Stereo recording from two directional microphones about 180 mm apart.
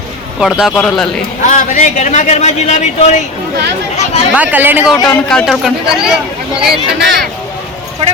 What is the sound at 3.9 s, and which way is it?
Chatter, 35° left (ahead or behind).